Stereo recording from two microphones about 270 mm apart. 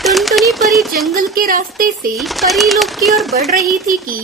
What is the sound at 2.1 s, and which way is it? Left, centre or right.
Speech, centre.